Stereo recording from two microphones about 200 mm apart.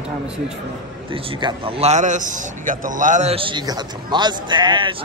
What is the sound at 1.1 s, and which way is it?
A man's voice, 25° right (ahead or behind).